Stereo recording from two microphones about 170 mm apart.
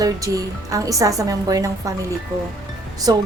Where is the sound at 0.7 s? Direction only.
20° right (ahead or behind).